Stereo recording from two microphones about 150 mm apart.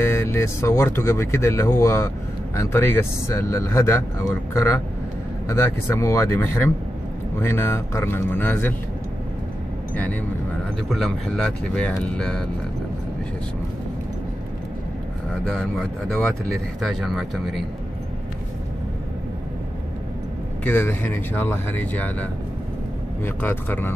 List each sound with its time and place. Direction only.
0.0 s speech: 15° left (ahead or behind)
10.9 s speech: centre (ahead or behind)
15.4 s speech: 5° left (ahead or behind)
20.6 s speech: 15° left (ahead or behind)